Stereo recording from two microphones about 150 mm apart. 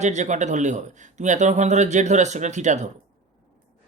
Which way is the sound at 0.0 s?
50° right (ahead or behind).